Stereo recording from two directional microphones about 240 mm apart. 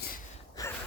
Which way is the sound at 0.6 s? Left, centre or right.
Centre.